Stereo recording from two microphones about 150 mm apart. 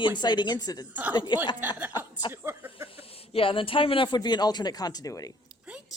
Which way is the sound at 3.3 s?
35° left (ahead or behind).